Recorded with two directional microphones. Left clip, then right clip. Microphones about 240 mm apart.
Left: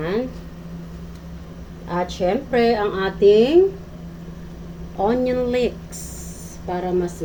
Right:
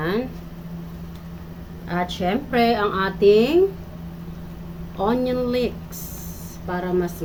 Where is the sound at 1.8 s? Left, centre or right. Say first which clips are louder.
Left 3 dB; centre.